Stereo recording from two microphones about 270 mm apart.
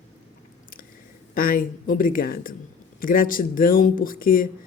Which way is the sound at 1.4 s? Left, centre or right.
Left.